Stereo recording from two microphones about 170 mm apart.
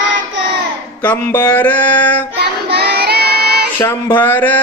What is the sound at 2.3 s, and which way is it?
Child singing, 70° right (ahead or behind).